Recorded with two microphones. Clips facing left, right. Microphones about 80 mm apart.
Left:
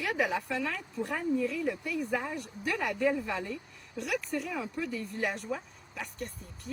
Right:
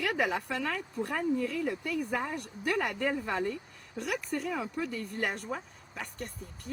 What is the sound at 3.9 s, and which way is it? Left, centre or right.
Speech, right.